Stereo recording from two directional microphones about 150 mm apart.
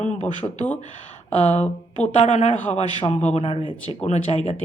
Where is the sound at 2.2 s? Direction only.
50° left (ahead or behind).